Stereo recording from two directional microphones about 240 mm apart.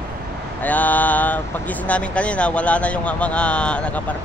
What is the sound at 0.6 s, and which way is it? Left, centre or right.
Mantra, centre.